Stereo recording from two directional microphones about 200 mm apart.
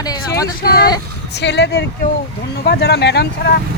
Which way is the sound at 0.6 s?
50° left (ahead or behind).